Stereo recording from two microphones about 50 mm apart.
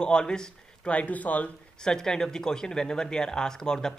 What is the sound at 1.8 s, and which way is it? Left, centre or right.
Speech, centre.